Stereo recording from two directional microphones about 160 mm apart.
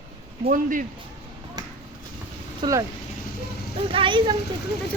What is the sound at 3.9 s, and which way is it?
Speech, 30° right (ahead or behind).